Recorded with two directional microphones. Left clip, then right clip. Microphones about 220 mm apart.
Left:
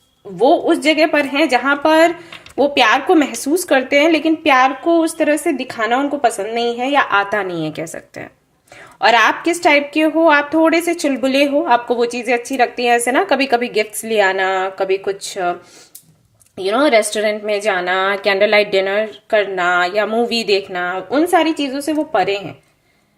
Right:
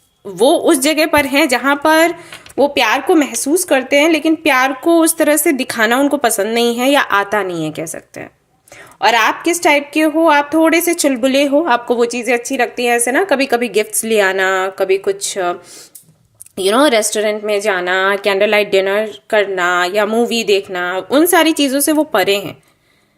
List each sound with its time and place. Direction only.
0.3 s a woman's voice: 35° right (ahead or behind)
16.6 s a woman's voice: 20° right (ahead or behind)